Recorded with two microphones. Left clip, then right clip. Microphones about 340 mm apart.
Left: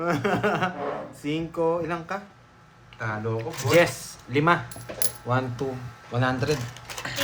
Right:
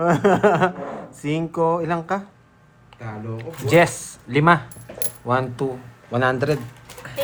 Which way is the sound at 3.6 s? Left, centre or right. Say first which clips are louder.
Right 4 dB; centre.